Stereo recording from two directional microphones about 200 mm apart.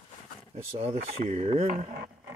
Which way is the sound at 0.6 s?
30° right (ahead or behind).